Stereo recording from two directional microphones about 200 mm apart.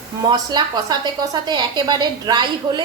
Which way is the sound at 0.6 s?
20° right (ahead or behind).